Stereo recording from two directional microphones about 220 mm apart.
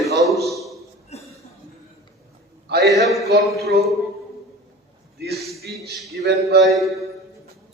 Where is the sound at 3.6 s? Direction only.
45° right (ahead or behind).